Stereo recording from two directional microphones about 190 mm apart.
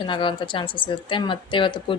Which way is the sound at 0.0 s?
25° left (ahead or behind).